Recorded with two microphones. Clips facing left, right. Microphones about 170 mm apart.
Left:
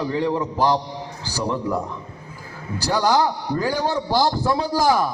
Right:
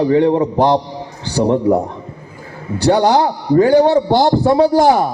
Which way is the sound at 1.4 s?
60° right (ahead or behind).